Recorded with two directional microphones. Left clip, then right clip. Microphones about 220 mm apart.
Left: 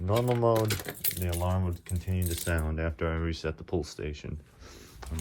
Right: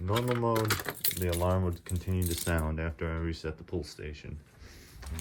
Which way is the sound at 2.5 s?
5° right (ahead or behind).